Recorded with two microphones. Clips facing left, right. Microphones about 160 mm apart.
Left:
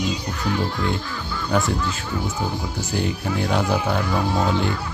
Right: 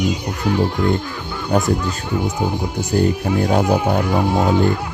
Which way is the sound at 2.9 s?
45° right (ahead or behind).